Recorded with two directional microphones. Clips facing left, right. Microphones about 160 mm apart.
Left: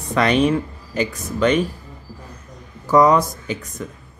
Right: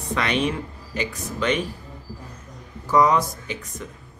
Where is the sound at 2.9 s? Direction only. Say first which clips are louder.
Left 4 dB; 45° left (ahead or behind).